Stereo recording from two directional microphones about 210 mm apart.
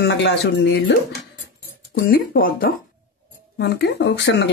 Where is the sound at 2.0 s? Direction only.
45° left (ahead or behind).